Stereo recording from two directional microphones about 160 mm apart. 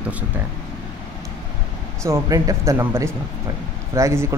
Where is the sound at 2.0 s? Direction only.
20° right (ahead or behind).